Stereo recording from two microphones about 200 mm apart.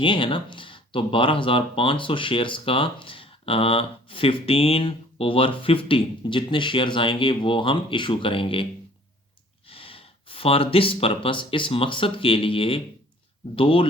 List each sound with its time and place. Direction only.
0.0 s speech: 25° left (ahead or behind)
9.6 s speech: 25° left (ahead or behind)